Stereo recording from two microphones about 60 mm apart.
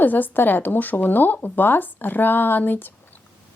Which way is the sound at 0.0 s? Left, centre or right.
Left.